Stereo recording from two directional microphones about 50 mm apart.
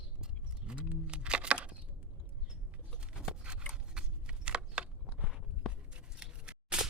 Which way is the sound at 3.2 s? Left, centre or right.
Right.